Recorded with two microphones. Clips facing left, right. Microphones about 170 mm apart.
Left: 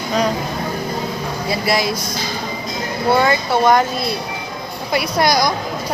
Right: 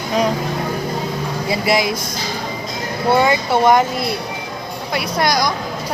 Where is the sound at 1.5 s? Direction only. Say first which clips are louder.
Right 1 dB; 20° right (ahead or behind).